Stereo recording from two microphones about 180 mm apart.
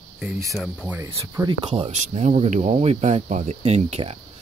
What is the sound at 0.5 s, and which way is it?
Speech, centre (ahead or behind).